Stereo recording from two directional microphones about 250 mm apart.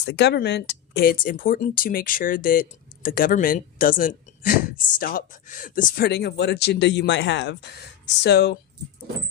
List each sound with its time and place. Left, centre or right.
0.0 s speech: left